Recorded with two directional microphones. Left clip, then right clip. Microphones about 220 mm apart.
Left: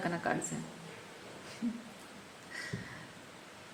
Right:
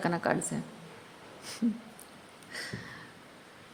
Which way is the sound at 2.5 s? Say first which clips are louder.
Right 3 dB; 45° right (ahead or behind).